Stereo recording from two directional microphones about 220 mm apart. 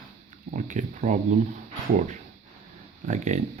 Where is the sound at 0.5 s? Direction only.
35° right (ahead or behind).